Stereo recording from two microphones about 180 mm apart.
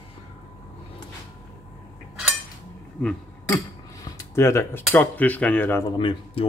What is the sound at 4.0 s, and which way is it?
Cutlery, 15° left (ahead or behind).